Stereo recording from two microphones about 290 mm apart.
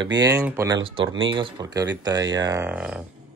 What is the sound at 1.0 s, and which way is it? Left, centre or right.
Speech, right.